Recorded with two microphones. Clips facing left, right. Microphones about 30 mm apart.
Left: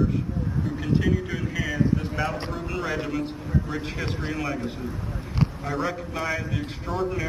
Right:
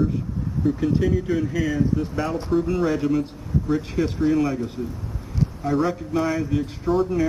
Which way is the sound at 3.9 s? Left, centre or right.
Left.